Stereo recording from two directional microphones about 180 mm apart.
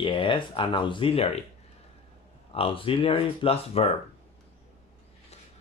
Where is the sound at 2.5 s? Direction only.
30° left (ahead or behind).